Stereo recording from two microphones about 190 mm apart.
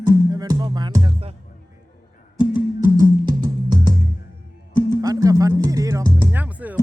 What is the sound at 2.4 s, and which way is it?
Music, 25° left (ahead or behind).